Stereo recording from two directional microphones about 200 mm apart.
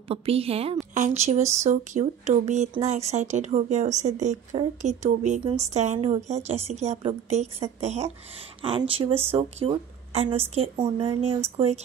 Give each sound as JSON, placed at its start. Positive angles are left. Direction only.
{"t": 0.1, "sound": "speech", "side_deg": -30}